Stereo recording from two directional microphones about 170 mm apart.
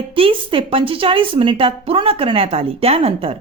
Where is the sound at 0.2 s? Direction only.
30° right (ahead or behind).